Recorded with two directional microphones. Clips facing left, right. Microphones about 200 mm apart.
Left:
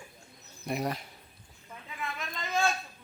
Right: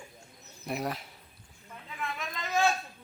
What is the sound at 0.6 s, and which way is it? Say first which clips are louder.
Speech: left 1 dB; centre (ahead or behind).